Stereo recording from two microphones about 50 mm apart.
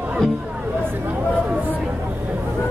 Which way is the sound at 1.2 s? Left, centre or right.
Right.